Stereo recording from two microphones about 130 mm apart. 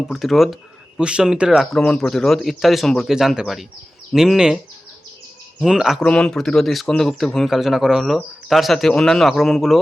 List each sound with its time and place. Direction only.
0.1 s speech: centre (ahead or behind)